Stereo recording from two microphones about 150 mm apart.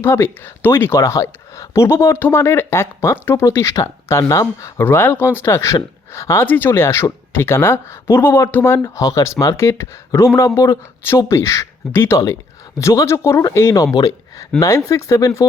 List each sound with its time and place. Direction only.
0.0 s speech: 15° left (ahead or behind)